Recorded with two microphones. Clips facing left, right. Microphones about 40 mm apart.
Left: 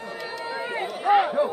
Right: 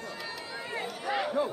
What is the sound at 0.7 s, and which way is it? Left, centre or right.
Run, left.